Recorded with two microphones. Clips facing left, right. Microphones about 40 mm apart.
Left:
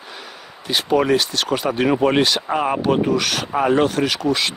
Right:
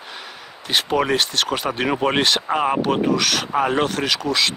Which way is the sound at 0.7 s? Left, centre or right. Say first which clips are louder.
Left 2 dB; right.